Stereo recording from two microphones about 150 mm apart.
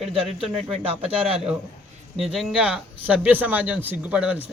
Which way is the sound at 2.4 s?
Centre (ahead or behind).